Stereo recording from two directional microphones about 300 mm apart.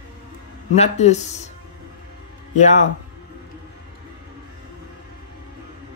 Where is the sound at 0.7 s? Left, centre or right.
Left.